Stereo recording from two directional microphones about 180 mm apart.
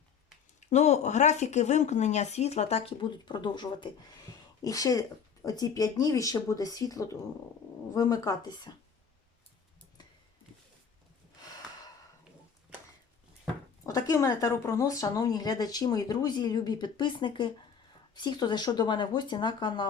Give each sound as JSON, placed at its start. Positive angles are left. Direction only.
{"t": 0.6, "sound": "speech", "side_deg": 40}
{"t": 13.8, "sound": "speech", "side_deg": 15}